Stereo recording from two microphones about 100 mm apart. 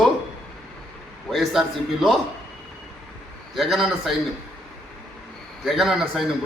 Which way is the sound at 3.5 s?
Centre (ahead or behind).